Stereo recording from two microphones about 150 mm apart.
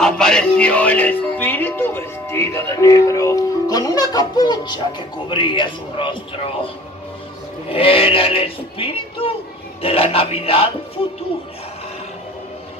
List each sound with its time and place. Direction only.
0.0 s speech: 5° left (ahead or behind); by 6.7 s 35° left (ahead or behind)
7.7 s speech: 40° left (ahead or behind)